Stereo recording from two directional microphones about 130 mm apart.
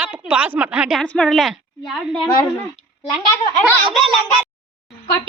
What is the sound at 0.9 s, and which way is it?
A woman's voice, 5° left (ahead or behind).